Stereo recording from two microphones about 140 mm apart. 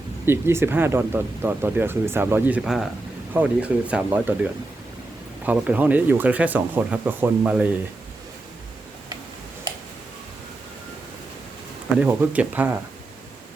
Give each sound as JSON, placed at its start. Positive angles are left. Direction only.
{"t": 0.3, "sound": "speech", "side_deg": -15}
{"t": 2.6, "sound": "speech", "side_deg": 0}
{"t": 11.9, "sound": "speech", "side_deg": -10}